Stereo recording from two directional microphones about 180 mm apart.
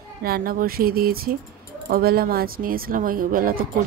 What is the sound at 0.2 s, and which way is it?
Speech, 55° right (ahead or behind).